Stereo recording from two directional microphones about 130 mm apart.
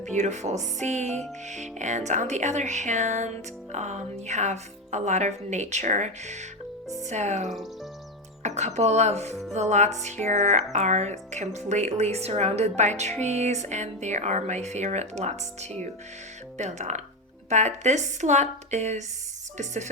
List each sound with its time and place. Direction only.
0.2 s speech: 60° right (ahead or behind)
7.4 s speech: centre (ahead or behind)
8.4 s speech: 60° right (ahead or behind)
9.3 s music: centre (ahead or behind)
9.6 s speech: 60° right (ahead or behind)
16.6 s speech: 65° right (ahead or behind)